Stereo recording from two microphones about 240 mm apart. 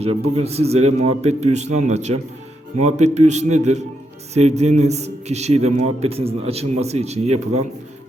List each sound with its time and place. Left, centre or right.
0.0 s a man's voice: right